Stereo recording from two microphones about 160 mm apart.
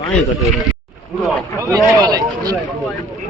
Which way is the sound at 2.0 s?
25° right (ahead or behind).